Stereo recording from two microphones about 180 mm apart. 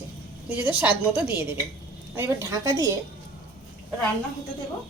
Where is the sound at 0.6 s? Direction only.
10° right (ahead or behind).